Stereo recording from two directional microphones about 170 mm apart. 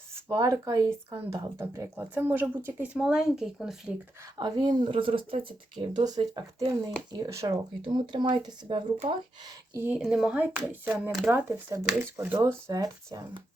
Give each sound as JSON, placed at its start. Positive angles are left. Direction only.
{"t": 0.3, "sound": "speech", "side_deg": -20}
{"t": 4.4, "sound": "speech", "side_deg": -25}
{"t": 9.7, "sound": "speech", "side_deg": -10}